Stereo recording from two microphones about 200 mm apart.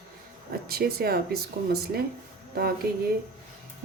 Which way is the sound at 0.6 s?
50° right (ahead or behind).